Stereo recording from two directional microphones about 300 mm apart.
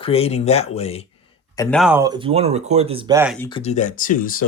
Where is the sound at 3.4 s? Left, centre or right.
Centre.